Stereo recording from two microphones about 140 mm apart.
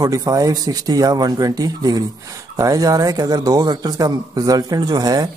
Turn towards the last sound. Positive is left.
turn(degrees=-25)  # may be behind; listen again after turning